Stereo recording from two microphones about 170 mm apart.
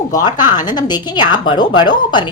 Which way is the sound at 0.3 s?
25° left (ahead or behind).